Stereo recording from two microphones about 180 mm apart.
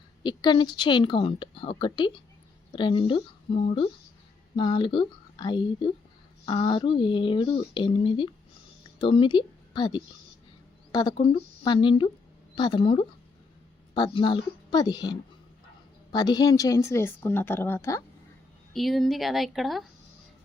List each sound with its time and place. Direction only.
0.2 s a woman's voice: 25° left (ahead or behind)
18.7 s speech: centre (ahead or behind)